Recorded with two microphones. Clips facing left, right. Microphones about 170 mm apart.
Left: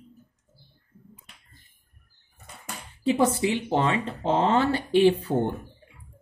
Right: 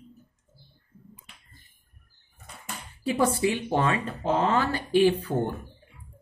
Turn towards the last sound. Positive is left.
turn(degrees=25)  # may be behind; listen again after turning